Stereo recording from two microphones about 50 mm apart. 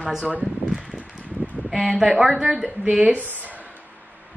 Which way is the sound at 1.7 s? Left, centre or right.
Centre.